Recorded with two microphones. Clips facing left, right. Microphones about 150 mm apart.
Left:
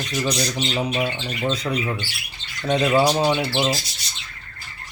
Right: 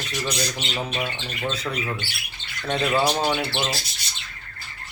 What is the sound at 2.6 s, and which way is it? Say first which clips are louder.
Speech: left 4 dB; 15° left (ahead or behind).